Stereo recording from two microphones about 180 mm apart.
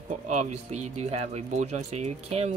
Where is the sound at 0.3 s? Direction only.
40° right (ahead or behind).